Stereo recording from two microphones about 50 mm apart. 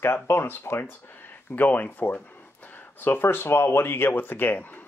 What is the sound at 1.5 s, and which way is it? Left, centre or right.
Speech, left.